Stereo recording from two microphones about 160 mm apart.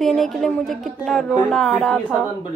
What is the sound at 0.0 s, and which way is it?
A woman's voice, centre (ahead or behind).